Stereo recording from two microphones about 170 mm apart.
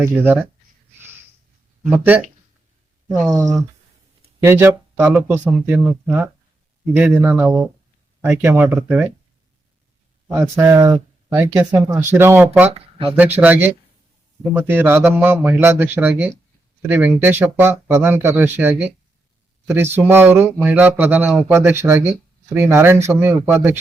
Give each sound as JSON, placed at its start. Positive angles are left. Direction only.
{"t": 0.0, "sound": "speech", "side_deg": -10}
{"t": 1.9, "sound": "speech", "side_deg": -10}
{"t": 4.4, "sound": "speech", "side_deg": -15}
{"t": 10.3, "sound": "speech", "side_deg": -15}